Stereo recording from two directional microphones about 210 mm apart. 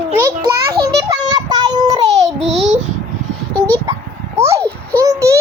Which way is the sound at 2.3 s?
Centre (ahead or behind).